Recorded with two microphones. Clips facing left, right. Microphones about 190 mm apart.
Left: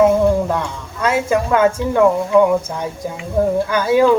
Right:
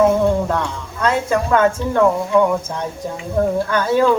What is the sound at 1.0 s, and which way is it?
A woman's voice, 10° left (ahead or behind).